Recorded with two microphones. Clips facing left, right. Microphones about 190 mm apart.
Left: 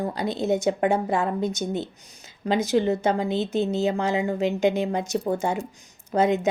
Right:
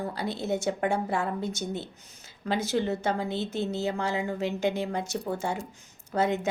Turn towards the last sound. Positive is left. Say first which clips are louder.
# left 5 dB
turn(degrees=20)  # may be behind; listen again after turning